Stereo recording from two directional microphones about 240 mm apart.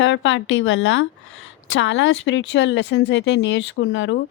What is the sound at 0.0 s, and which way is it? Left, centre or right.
Speech, left.